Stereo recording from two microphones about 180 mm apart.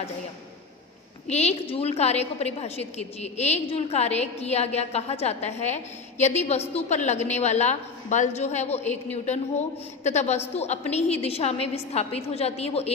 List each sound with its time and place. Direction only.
1.2 s a woman's voice: 35° left (ahead or behind)